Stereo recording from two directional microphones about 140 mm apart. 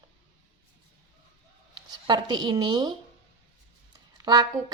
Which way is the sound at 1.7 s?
30° right (ahead or behind).